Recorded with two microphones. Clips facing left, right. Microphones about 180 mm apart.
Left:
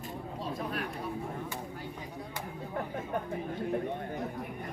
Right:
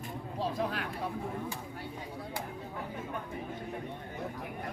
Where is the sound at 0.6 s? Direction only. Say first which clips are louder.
Right 1 dB; 90° right.